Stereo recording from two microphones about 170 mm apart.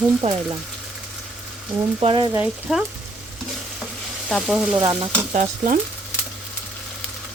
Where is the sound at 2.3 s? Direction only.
5° right (ahead or behind).